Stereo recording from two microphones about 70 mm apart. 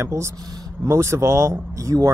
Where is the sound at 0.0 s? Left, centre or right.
Right.